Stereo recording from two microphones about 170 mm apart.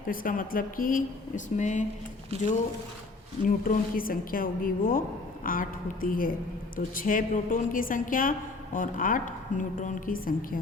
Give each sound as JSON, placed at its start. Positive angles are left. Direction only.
{"t": 0.1, "sound": "a woman's voice", "side_deg": 55}
{"t": 3.4, "sound": "a woman's voice", "side_deg": 55}